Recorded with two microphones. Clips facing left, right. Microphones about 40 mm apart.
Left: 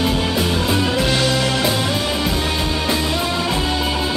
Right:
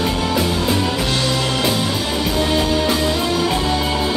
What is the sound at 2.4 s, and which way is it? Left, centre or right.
Music, centre.